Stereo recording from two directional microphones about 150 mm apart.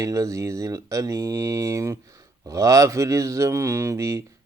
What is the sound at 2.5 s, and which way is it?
Speech, 20° right (ahead or behind).